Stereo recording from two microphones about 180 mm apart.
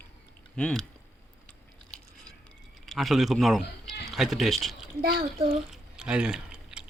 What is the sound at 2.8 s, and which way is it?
Speech, centre (ahead or behind).